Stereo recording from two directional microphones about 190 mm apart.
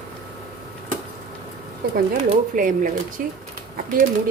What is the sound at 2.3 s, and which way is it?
Speech, 45° right (ahead or behind).